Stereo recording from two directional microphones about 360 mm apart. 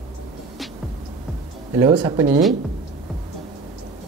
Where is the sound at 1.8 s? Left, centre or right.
Centre.